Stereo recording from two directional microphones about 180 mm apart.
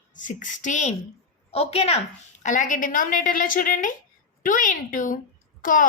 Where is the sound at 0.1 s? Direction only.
45° left (ahead or behind).